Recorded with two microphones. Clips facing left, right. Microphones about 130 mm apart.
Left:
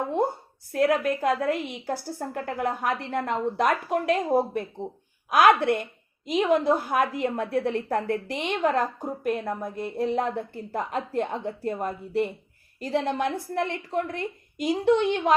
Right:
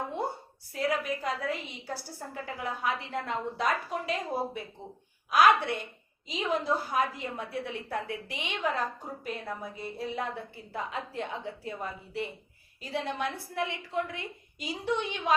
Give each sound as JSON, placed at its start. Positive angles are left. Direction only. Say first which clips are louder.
{"t": 0.7, "sound": "a woman's voice", "louder": "left 8 dB", "side_deg": 60}